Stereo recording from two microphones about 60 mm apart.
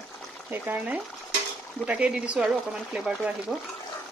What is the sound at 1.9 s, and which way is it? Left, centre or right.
Speech, centre.